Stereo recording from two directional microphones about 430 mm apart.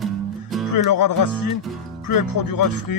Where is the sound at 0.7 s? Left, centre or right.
Left.